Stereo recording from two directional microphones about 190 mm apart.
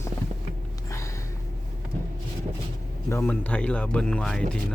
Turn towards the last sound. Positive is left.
turn(degrees=5)  # may be behind; listen again after turning